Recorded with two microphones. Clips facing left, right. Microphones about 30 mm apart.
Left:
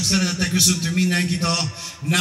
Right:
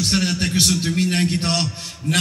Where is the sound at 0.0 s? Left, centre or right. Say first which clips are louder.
Right 1 dB; right.